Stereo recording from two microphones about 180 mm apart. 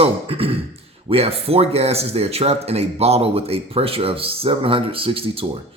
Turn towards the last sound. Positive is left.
turn(degrees=-30)  # may be behind; listen again after turning